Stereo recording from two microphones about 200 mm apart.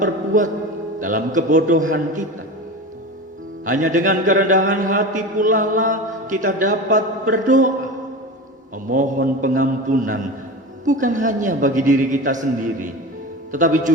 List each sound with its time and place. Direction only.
0.0 s a man's voice: 40° right (ahead or behind)
3.7 s a man's voice: 40° right (ahead or behind)
8.7 s a man's voice: 40° right (ahead or behind)